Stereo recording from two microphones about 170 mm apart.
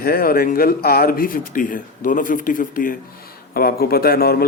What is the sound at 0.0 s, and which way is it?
Speech, 60° left (ahead or behind).